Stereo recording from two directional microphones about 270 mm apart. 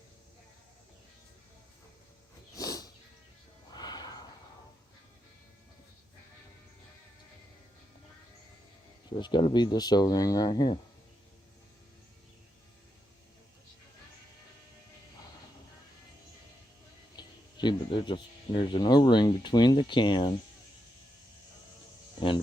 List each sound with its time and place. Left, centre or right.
2.6 s music: centre
9.0 s speech: centre
17.2 s speech: centre